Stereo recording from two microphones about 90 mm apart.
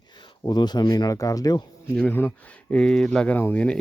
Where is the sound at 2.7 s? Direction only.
10° left (ahead or behind).